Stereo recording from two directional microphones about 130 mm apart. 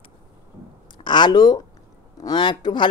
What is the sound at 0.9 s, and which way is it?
Speech, 35° left (ahead or behind).